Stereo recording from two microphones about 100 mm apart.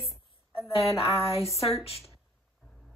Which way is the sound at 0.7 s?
75° left (ahead or behind).